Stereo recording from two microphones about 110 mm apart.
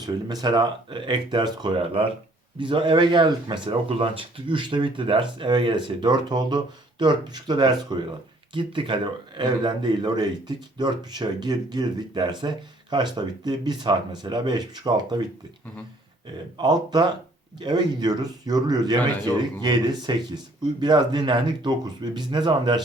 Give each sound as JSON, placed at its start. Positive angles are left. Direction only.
{"t": 0.4, "sound": "a man's voice", "side_deg": -40}
{"t": 16.6, "sound": "a man's voice", "side_deg": -40}